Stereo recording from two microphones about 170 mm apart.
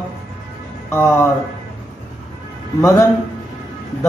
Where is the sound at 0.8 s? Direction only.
15° left (ahead or behind).